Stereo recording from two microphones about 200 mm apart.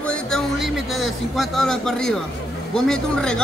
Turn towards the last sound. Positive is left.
turn(degrees=5)  # may be behind; listen again after turning